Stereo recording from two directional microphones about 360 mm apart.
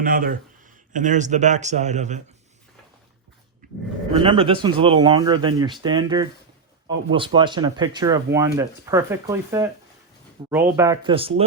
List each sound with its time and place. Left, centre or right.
0.0 s a man's voice: right
3.6 s a sound: right
4.1 s speech: centre
7.3 s speech: centre